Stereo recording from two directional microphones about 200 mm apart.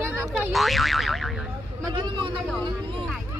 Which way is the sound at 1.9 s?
20° right (ahead or behind).